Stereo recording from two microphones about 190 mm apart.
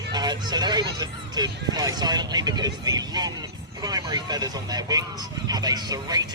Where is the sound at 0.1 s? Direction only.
20° right (ahead or behind).